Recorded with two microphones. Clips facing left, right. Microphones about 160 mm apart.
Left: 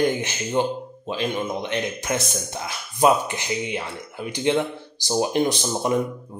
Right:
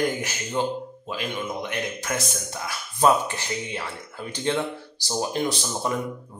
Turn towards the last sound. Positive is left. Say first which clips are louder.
# left 4 dB
turn(degrees=20)  # may be behind; listen again after turning